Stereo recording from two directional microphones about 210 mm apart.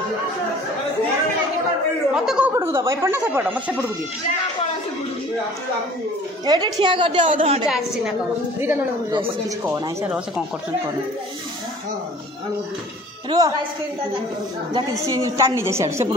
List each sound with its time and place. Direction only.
2.1 s speech: 5° right (ahead or behind)
6.4 s a woman's voice: 20° right (ahead or behind)
7.6 s speech: 5° right (ahead or behind)
13.3 s speech: 15° right (ahead or behind)
15.0 s speech: 15° right (ahead or behind)